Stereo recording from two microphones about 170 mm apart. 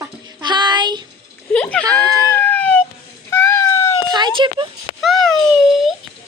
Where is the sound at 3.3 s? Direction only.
15° left (ahead or behind).